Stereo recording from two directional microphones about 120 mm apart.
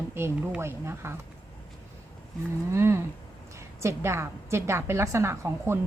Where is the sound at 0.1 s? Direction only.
20° right (ahead or behind).